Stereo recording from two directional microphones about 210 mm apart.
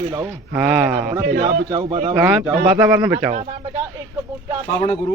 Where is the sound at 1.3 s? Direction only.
50° right (ahead or behind).